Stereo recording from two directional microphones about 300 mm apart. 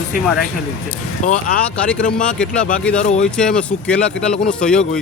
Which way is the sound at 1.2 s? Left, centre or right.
Left.